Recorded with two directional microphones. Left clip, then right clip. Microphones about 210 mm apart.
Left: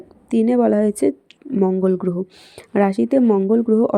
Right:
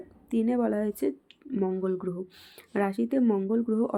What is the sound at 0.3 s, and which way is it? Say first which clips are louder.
Speech: left 11 dB; 40° left (ahead or behind).